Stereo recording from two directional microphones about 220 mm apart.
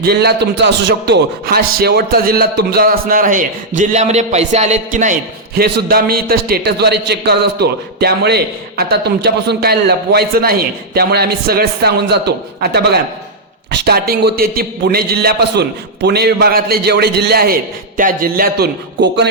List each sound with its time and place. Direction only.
0.0 s a man's voice: 45° right (ahead or behind)
5.5 s a man's voice: 45° right (ahead or behind)